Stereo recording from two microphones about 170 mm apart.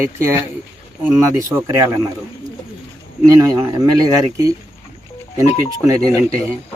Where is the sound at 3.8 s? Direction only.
20° right (ahead or behind).